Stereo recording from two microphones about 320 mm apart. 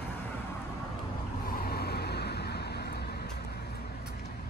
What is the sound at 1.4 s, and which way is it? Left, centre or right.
Vehicle, left.